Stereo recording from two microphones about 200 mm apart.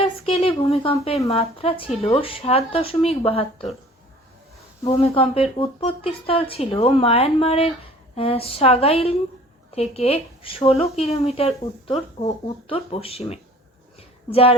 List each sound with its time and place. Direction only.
0.0 s a sound: 30° left (ahead or behind)
1.3 s speech: 30° left (ahead or behind)
4.8 s speech: 25° left (ahead or behind)